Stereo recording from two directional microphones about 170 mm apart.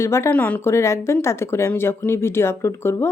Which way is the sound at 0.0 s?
15° left (ahead or behind).